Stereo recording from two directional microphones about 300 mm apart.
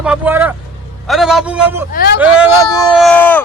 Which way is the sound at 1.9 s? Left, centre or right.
Left.